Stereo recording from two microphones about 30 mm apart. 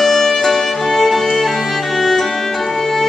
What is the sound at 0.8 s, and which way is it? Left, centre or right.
Music, centre.